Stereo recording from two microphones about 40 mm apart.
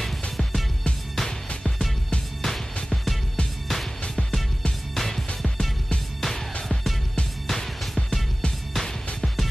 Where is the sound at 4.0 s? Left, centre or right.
Left.